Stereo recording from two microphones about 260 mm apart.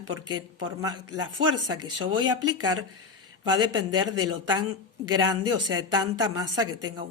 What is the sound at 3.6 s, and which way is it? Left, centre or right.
Speech, centre.